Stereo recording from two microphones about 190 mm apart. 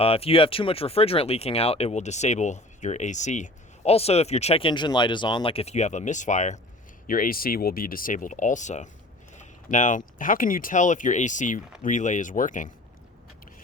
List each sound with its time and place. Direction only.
0.0 s speech: 30° left (ahead or behind)